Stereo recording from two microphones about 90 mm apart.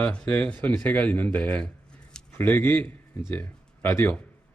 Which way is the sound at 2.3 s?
25° left (ahead or behind).